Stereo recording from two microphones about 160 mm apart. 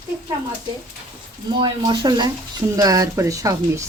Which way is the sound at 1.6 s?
25° right (ahead or behind).